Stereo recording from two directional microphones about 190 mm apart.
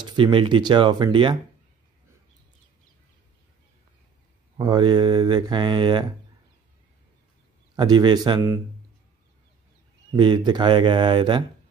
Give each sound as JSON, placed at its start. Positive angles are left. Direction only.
{"t": 0.0, "sound": "speech", "side_deg": -25}
{"t": 4.6, "sound": "speech", "side_deg": -20}
{"t": 7.7, "sound": "speech", "side_deg": -20}
{"t": 10.1, "sound": "speech", "side_deg": -25}